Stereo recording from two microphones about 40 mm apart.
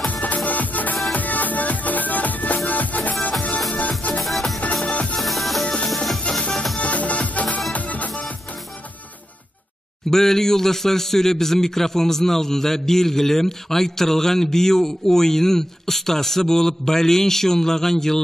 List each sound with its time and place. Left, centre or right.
0.0 s music: left
4.2 s music: centre
4.8 s music: left
5.2 s music: centre
6.8 s music: left
10.1 s a man's voice: centre